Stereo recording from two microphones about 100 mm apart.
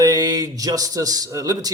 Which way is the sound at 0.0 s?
40° right (ahead or behind).